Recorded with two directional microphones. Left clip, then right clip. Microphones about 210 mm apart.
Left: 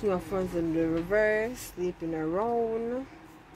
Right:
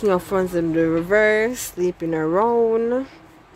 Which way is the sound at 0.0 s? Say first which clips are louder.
Right 10 dB; 40° right (ahead or behind).